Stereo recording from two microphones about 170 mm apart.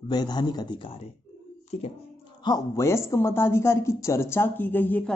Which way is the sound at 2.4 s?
20° left (ahead or behind).